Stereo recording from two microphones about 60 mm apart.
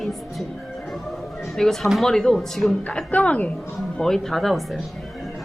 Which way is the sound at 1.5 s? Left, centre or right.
Centre.